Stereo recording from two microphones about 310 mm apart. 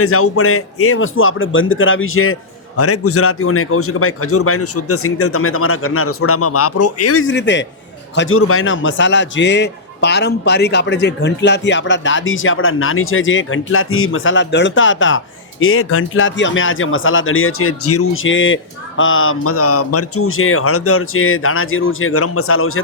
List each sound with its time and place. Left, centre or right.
0.0 s speech: left